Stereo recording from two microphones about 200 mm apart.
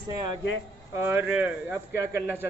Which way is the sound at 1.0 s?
10° right (ahead or behind).